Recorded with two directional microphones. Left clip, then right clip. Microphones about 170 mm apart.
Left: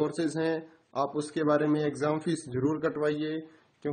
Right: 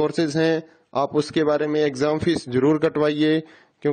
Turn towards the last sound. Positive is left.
turn(degrees=-60)  # may be behind; listen again after turning